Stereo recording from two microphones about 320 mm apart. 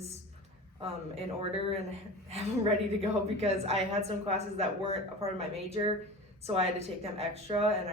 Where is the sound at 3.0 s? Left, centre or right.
Centre.